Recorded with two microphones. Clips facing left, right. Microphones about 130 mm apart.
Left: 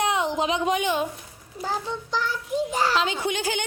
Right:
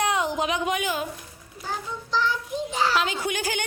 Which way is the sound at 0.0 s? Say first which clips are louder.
Left 1 dB; 20° left (ahead or behind).